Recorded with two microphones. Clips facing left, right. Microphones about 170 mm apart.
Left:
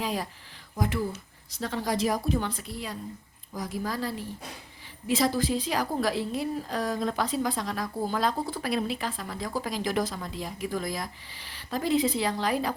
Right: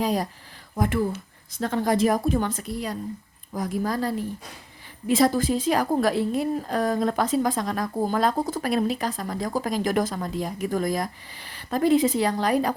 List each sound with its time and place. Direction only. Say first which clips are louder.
0.0 s speech: right 6 dB; 40° right (ahead or behind)
0.8 s a woman's voice: right 5 dB; 55° right (ahead or behind)